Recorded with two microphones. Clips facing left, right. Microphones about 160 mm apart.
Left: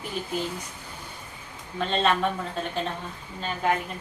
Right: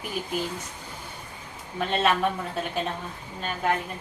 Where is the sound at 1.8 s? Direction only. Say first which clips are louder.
Even; 10° right (ahead or behind).